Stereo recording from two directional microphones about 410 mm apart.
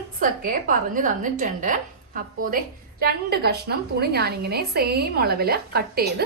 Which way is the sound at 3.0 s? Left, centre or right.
Right.